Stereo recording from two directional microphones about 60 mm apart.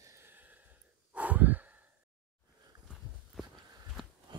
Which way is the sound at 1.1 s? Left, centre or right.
Right.